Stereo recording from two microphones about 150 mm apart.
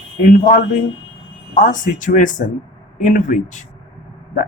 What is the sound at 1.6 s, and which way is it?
Speech, 60° left (ahead or behind).